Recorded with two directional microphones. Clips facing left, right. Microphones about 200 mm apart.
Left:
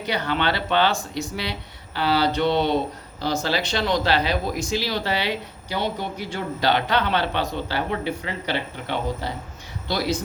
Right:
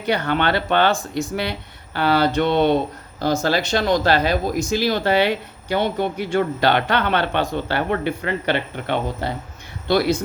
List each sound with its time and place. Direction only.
0.0 s speech: 50° right (ahead or behind)